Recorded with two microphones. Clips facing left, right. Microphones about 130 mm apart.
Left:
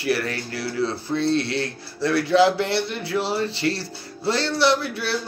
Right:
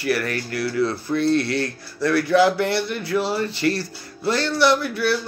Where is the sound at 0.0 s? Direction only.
25° left (ahead or behind).